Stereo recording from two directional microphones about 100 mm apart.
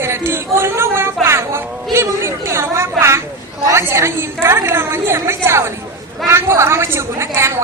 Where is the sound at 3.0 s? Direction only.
25° right (ahead or behind).